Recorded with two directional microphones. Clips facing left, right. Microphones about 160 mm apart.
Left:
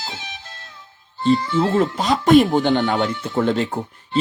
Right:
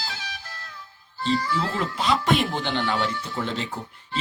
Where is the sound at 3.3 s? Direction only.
50° left (ahead or behind).